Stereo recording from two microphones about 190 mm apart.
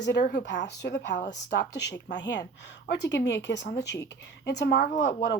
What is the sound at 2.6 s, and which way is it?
Speech, 65° left (ahead or behind).